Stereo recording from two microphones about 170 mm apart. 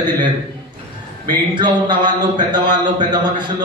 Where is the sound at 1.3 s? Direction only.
25° right (ahead or behind).